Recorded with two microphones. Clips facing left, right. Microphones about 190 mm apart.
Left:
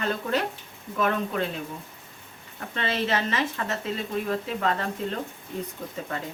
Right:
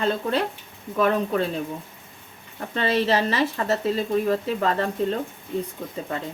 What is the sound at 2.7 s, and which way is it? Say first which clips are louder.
Speech: right 5 dB; 35° right (ahead or behind).